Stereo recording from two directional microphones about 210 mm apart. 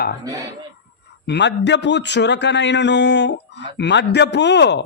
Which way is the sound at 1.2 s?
55° left (ahead or behind).